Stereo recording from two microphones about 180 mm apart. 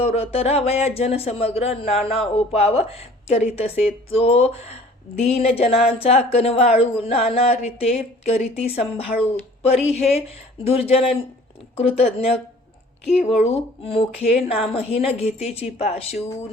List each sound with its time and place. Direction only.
0.0 s a woman's voice: 35° left (ahead or behind)
13.4 s a woman's voice: 30° left (ahead or behind)